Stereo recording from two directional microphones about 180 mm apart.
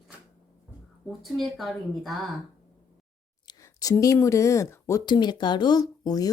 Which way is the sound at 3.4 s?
20° left (ahead or behind).